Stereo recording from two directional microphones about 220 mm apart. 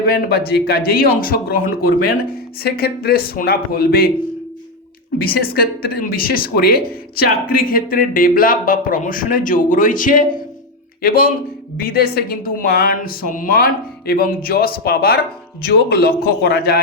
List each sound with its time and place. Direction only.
0.1 s a man's voice: 45° left (ahead or behind)
5.1 s a man's voice: 45° left (ahead or behind)